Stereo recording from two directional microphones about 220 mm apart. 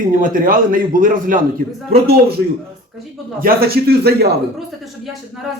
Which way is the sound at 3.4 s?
45° right (ahead or behind).